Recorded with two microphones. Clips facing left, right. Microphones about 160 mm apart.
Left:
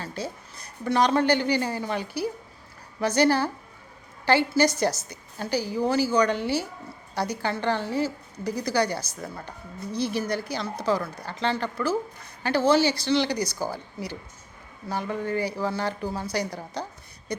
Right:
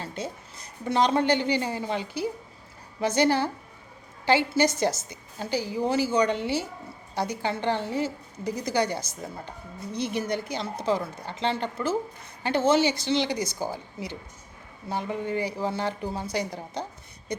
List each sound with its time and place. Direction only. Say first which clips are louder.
0.5 s a woman's voice: left 1 dB; 25° right (ahead or behind)
9.9 s a woman's voice: left 2 dB; 35° left (ahead or behind)
10.2 s a woman's voice: left 1 dB; 25° right (ahead or behind)